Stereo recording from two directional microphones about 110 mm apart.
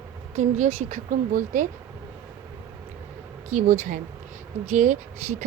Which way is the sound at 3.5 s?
90° right.